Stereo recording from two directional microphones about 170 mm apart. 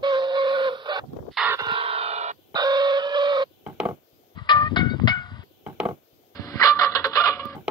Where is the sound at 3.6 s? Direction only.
10° right (ahead or behind).